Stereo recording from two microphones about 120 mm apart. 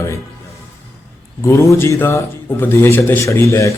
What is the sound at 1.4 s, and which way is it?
Speech, 25° left (ahead or behind).